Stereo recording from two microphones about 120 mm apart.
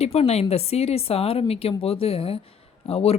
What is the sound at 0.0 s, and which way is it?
Speech, 60° left (ahead or behind).